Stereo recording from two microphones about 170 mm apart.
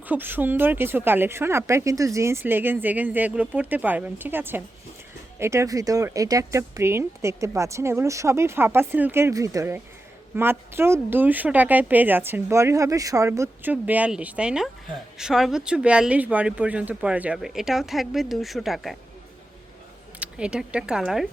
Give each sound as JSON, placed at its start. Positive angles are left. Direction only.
{"t": 0.1, "sound": "a woman's voice", "side_deg": -10}
{"t": 20.1, "sound": "speech", "side_deg": -5}